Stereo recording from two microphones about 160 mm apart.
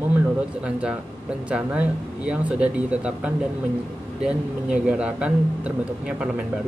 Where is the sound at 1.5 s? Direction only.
5° right (ahead or behind).